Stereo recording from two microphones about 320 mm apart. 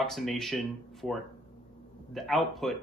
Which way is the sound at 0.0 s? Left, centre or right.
Centre.